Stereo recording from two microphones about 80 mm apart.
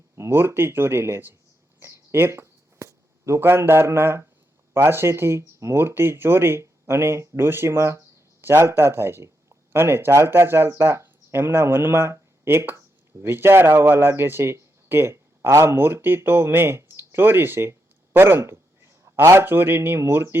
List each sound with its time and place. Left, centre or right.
0.2 s speech: right
1.8 s a sound: right
4.7 s speech: right